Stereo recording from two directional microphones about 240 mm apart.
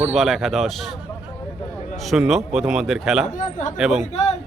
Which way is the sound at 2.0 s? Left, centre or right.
Centre.